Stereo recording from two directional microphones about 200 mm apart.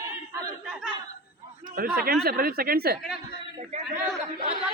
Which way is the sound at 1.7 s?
45° right (ahead or behind).